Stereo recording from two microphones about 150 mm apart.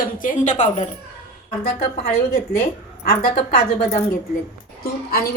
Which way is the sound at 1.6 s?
90° left.